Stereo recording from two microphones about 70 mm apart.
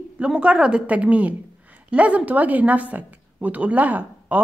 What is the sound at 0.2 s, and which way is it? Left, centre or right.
A woman's voice, centre.